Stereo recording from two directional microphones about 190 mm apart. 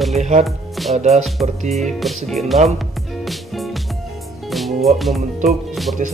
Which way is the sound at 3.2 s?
Centre (ahead or behind).